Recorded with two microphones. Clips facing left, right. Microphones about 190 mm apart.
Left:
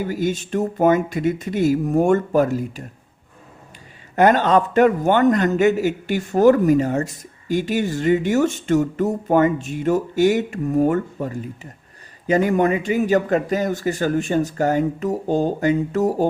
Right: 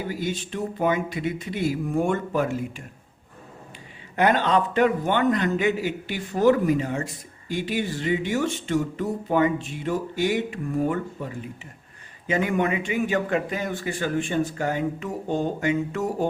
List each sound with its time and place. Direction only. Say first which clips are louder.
0.1 s a man's voice: left 7 dB; 45° left (ahead or behind)
4.1 s a man's voice: left 5 dB; 45° left (ahead or behind)